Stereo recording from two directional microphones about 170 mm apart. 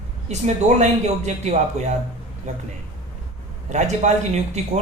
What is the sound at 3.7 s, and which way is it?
Speech, 45° right (ahead or behind).